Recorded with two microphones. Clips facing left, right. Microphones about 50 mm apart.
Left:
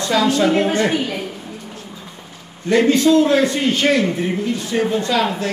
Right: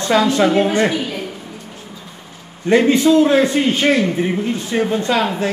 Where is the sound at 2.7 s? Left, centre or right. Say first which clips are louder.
Right 1 dB; right.